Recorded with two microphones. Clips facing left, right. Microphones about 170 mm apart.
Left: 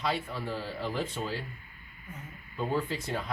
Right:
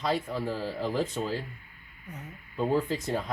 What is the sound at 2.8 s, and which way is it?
Speech, 45° right (ahead or behind).